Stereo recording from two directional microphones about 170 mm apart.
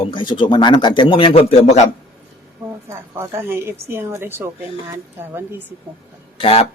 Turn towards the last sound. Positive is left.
turn(degrees=35)  # may be behind; listen again after turning